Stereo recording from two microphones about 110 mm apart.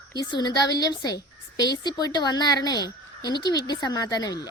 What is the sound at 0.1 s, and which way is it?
A woman's voice, 40° left (ahead or behind).